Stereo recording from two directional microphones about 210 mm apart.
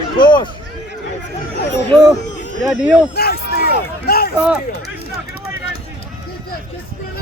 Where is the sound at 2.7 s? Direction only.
5° right (ahead or behind).